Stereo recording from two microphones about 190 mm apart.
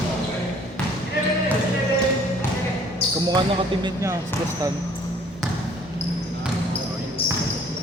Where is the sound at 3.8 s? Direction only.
15° right (ahead or behind).